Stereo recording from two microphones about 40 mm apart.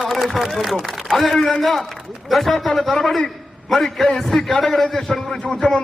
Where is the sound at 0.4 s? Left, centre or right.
Centre.